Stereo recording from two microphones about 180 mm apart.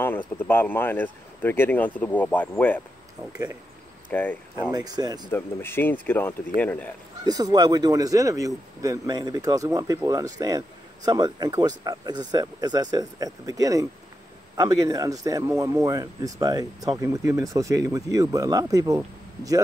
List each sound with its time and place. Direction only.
0.4 s speech: 10° left (ahead or behind)
4.1 s speech: 10° left (ahead or behind)
4.7 s speech: 20° right (ahead or behind)
5.3 s speech: 10° left (ahead or behind)
7.2 s speech: 20° right (ahead or behind)